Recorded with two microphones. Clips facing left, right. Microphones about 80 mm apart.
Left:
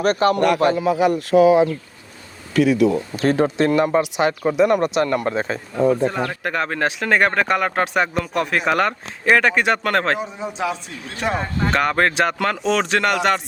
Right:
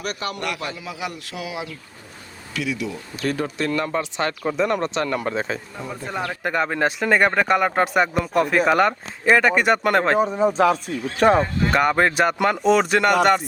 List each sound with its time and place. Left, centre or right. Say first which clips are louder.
0.0 s speech: left 11 dB; left
3.2 s speech: left 5 dB; left; by 10.2 s centre
10.2 s speech: right 8 dB; right
11.7 s speech: even; centre